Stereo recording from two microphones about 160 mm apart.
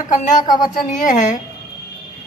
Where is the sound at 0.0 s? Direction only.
55° left (ahead or behind).